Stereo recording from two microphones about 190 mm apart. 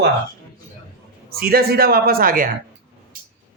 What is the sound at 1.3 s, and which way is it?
Speech, 55° right (ahead or behind).